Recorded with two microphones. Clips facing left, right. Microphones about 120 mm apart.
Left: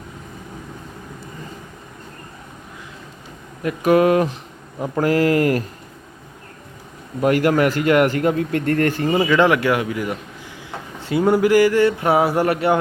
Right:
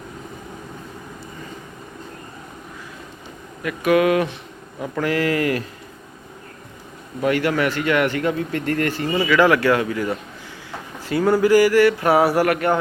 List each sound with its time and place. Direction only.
3.6 s a man's voice: 40° left (ahead or behind)
7.2 s a man's voice: 45° left (ahead or behind)
9.2 s speech: 20° left (ahead or behind)
10.7 s a sound: 20° left (ahead or behind)
12.5 s speech: 5° left (ahead or behind)